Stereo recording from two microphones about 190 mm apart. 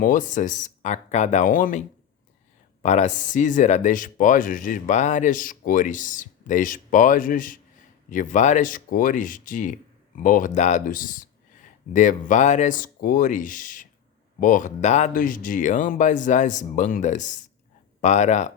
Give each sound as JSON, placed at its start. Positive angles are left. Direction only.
{"t": 0.0, "sound": "speech", "side_deg": 45}
{"t": 2.8, "sound": "speech", "side_deg": 40}